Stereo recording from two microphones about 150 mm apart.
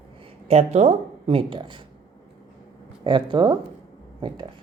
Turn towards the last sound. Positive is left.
turn(degrees=-30)  # may be behind; listen again after turning